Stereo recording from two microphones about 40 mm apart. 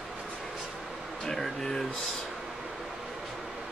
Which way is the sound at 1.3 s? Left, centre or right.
Centre.